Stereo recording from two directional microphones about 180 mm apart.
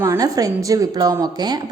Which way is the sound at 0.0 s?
20° right (ahead or behind).